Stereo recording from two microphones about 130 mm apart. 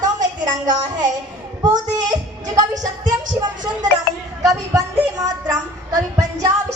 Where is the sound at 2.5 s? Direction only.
30° right (ahead or behind).